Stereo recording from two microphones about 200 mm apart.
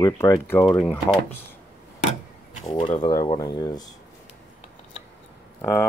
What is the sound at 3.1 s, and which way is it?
Speech, 15° left (ahead or behind).